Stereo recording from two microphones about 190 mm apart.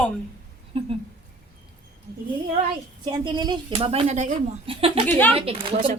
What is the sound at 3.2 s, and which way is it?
Speech, 25° right (ahead or behind).